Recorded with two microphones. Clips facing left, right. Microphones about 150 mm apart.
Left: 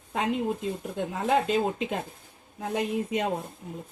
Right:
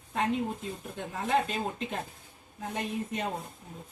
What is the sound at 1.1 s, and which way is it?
Speech, 85° left.